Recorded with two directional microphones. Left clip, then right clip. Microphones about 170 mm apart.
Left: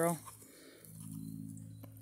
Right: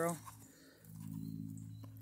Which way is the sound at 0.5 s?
15° left (ahead or behind).